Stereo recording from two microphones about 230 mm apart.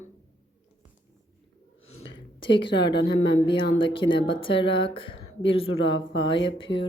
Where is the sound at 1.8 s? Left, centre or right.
Left.